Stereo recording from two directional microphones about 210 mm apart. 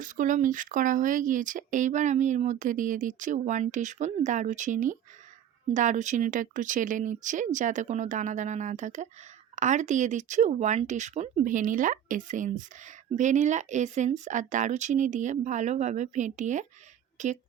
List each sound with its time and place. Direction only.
0.0 s speech: 40° right (ahead or behind)